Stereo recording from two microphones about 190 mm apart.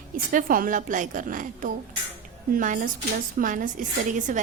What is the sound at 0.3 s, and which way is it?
A woman's voice, 45° right (ahead or behind).